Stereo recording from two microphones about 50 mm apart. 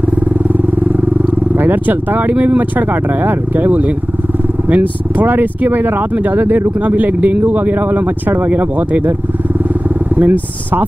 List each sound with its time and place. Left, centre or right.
1.6 s speech: right
10.1 s speech: right